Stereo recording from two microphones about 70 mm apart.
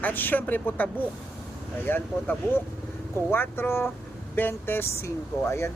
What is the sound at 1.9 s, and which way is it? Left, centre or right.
Speech, left.